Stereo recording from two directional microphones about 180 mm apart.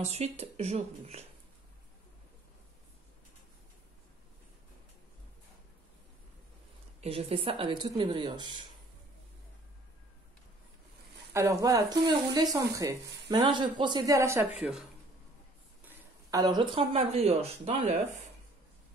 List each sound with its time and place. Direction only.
0.0 s speech: 35° right (ahead or behind)
7.0 s speech: 35° right (ahead or behind)
11.3 s speech: 15° right (ahead or behind)
14.6 s speech: 5° right (ahead or behind)
15.9 s speech: 20° right (ahead or behind)